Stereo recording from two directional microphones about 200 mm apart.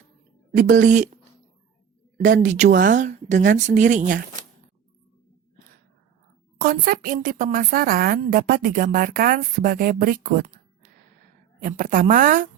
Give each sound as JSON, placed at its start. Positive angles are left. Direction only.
{"t": 0.5, "sound": "speech", "side_deg": -40}
{"t": 6.6, "sound": "speech", "side_deg": -45}
{"t": 11.6, "sound": "speech", "side_deg": -45}